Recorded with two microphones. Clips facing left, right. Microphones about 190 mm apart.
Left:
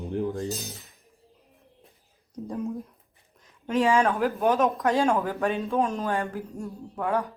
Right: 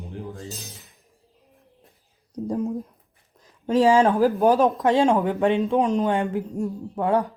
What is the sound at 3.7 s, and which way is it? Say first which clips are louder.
Speech: right 5 dB; 35° right (ahead or behind).